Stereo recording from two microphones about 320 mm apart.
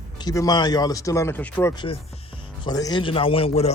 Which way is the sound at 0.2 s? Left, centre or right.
Centre.